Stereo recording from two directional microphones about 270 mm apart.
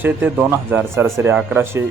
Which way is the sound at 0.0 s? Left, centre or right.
Centre.